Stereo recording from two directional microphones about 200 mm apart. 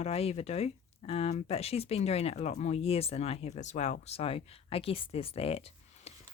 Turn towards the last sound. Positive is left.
turn(degrees=30)  # may be behind; listen again after turning